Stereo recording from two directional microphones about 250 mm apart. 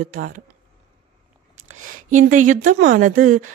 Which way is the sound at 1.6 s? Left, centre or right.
Right.